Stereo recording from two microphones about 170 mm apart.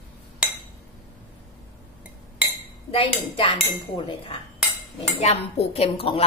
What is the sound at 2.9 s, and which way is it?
Speech, 35° left (ahead or behind).